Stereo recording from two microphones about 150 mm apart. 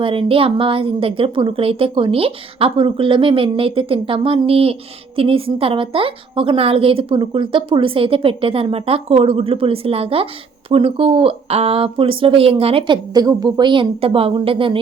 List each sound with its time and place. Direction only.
0.0 s a woman's voice: 35° right (ahead or behind)